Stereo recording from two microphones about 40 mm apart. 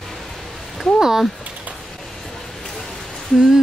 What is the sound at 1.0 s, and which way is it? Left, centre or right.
Speech, centre.